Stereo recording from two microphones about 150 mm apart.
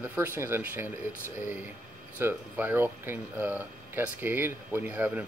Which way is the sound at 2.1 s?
15° right (ahead or behind).